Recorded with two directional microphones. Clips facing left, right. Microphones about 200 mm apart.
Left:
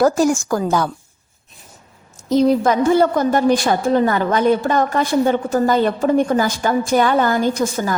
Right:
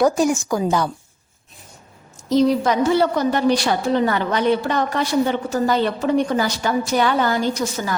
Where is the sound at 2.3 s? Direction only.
50° left (ahead or behind).